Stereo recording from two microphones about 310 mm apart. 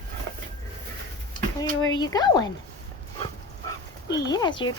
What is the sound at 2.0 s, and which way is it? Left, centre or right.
Speech, centre.